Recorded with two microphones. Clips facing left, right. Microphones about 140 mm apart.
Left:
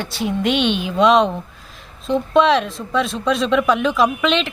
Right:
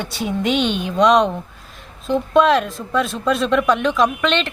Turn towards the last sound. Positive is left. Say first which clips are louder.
# left 1 dB
turn(degrees=5)  # may be behind; listen again after turning